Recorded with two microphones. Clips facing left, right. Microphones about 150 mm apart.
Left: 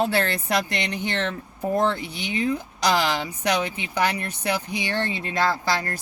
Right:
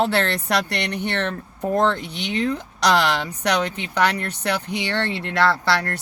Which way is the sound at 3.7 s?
10° left (ahead or behind).